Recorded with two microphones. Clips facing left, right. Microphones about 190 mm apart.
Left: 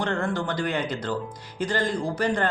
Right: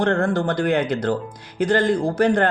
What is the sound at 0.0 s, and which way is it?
Speech, 55° right (ahead or behind).